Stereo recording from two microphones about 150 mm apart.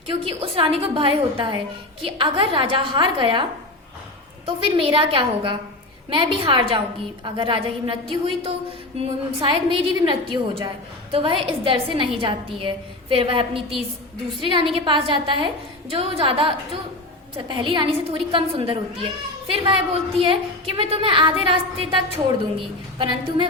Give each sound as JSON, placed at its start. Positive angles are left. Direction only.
{"t": 0.3, "sound": "a woman's voice", "side_deg": -40}
{"t": 4.4, "sound": "a woman's voice", "side_deg": -35}